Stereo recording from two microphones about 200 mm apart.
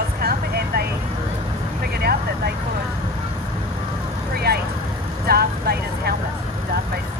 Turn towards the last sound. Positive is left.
turn(degrees=-50)  # may be behind; listen again after turning